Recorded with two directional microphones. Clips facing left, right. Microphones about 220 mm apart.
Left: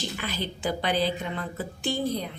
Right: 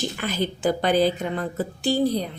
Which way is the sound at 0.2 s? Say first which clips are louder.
Right 7 dB; 45° right (ahead or behind).